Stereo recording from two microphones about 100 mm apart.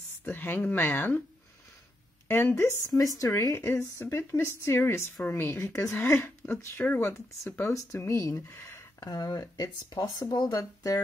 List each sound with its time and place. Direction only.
0.2 s speech: 20° left (ahead or behind)
2.2 s speech: 20° left (ahead or behind)
3.0 s speech: 35° left (ahead or behind)
3.5 s speech: 25° left (ahead or behind)